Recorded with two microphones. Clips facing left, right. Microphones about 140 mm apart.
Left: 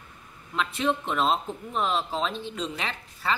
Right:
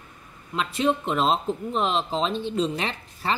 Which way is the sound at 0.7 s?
30° right (ahead or behind).